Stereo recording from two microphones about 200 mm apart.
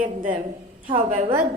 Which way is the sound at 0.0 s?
40° right (ahead or behind).